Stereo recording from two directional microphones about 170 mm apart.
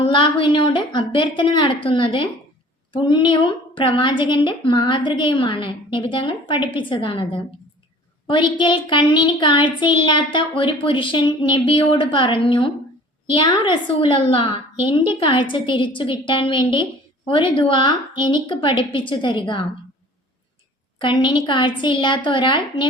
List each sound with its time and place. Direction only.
0.0 s a woman's voice: 30° left (ahead or behind)
21.0 s a woman's voice: 30° left (ahead or behind)